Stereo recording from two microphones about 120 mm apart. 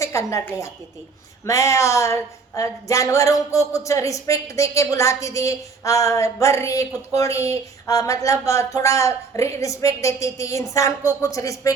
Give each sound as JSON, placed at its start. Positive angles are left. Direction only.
{"t": 0.0, "sound": "a woman's voice", "side_deg": 25}